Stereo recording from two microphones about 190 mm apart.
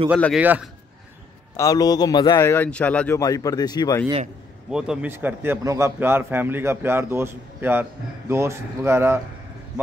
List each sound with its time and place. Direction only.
0.4 s a man's voice: 10° right (ahead or behind)
1.6 s a man's voice: 20° left (ahead or behind)
2.4 s speech: 10° left (ahead or behind)
3.2 s a man's voice: 20° left (ahead or behind)
4.6 s a man's voice: 5° right (ahead or behind)